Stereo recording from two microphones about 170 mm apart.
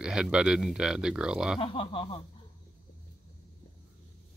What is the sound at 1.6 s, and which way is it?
Speech, 30° left (ahead or behind).